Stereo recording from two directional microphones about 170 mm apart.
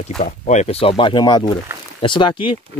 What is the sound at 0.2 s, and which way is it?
Speech, 45° left (ahead or behind).